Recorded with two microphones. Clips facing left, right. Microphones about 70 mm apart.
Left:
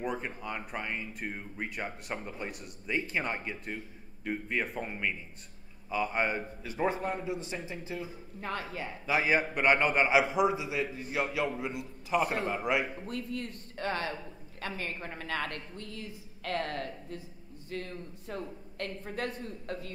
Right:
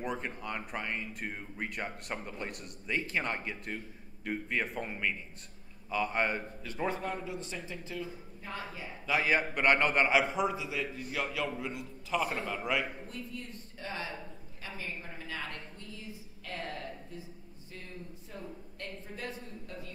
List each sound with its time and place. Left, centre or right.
0.0 s a man's voice: centre
8.4 s a woman's voice: left
9.1 s a man's voice: centre
13.0 s a woman's voice: left